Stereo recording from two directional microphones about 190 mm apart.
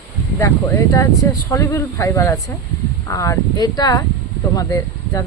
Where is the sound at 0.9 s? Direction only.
15° left (ahead or behind).